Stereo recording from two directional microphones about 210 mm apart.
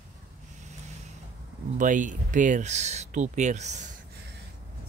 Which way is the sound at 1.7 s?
35° right (ahead or behind).